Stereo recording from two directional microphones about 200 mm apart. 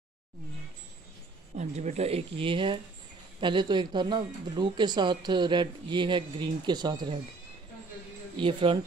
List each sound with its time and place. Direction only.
1.6 s speech: 35° right (ahead or behind)
8.4 s speech: 25° right (ahead or behind)